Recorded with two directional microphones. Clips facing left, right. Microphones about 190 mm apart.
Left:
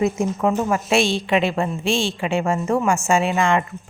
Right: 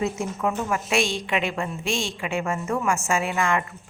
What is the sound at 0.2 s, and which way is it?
A woman's voice, 30° left (ahead or behind).